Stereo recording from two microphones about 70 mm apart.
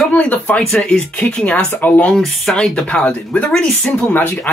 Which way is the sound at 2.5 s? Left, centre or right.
Centre.